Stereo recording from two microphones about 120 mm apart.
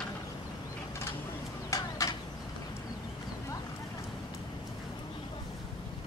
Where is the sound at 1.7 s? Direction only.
25° left (ahead or behind).